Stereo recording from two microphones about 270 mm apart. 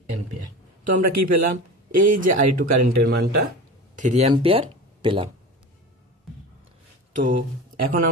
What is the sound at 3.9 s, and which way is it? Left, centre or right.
Speech, right.